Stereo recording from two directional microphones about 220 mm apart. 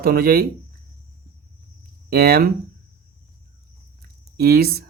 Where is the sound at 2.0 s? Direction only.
45° right (ahead or behind).